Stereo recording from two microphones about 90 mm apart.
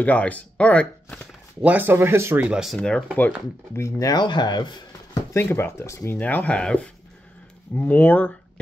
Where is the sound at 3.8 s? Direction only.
40° left (ahead or behind).